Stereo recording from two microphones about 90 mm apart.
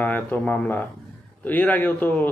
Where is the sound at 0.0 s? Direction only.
20° left (ahead or behind).